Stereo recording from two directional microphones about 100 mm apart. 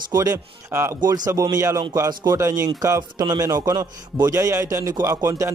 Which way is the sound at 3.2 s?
45° right (ahead or behind).